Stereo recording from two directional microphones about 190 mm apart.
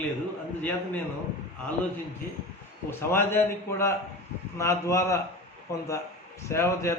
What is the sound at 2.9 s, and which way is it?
A man's voice, 10° left (ahead or behind).